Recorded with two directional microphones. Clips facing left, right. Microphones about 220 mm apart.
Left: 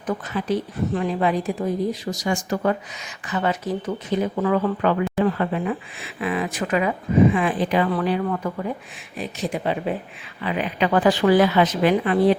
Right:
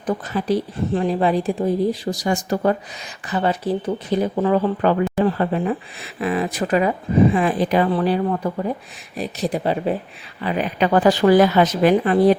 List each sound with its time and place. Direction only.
0.0 s speech: 35° right (ahead or behind)